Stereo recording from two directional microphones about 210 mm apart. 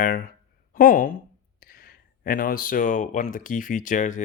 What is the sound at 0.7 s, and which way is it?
Speech, 40° left (ahead or behind).